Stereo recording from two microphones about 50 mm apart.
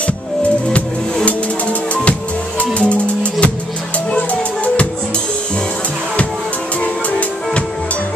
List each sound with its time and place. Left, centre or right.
0.0 s music: left
6.8 s music: left